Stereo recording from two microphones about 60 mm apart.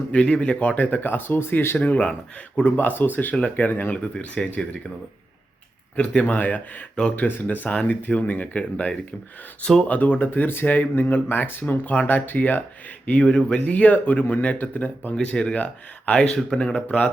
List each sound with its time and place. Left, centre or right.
0.1 s speech: centre
4.4 s speech: centre
6.0 s speech: left
7.2 s speech: left; by 9.8 s centre
9.8 s speech: left
11.6 s speech: left
13.1 s speech: left
15.1 s speech: centre
16.3 s speech: centre